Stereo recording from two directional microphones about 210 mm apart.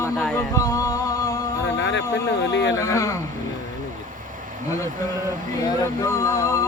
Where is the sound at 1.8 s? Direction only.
60° left (ahead or behind).